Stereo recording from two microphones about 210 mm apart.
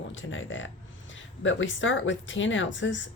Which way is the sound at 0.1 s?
65° left (ahead or behind).